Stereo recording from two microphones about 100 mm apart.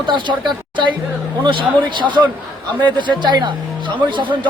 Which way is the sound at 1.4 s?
55° right (ahead or behind).